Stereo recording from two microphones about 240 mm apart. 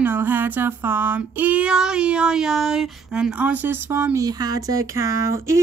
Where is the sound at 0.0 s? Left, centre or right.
Centre.